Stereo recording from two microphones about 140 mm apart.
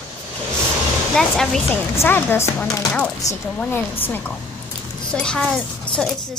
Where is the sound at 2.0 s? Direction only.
15° left (ahead or behind).